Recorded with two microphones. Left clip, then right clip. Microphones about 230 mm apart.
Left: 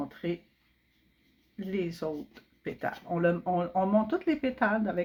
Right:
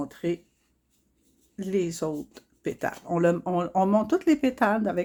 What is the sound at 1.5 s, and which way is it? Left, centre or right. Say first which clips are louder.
Speech: right 6 dB; right.